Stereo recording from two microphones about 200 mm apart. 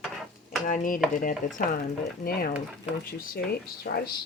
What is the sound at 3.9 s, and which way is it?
Speech, 50° left (ahead or behind).